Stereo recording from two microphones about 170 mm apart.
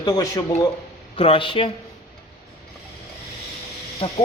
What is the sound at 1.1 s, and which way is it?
Speech, 35° left (ahead or behind).